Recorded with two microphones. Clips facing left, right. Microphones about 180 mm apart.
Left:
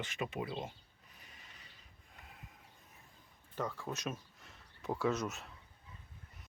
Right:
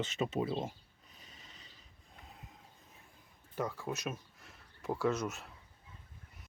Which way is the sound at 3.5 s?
10° right (ahead or behind).